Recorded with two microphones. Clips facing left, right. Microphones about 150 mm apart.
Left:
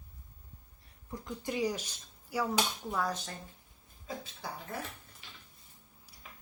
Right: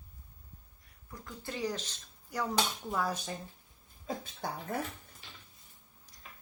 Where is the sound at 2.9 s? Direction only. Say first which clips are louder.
Right 1 dB; 5° right (ahead or behind).